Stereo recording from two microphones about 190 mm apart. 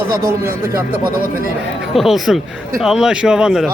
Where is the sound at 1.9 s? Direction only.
Centre (ahead or behind).